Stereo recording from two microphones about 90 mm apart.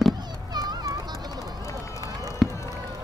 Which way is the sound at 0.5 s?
50° right (ahead or behind).